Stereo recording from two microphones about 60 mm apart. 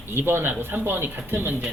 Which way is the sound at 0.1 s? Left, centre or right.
Right.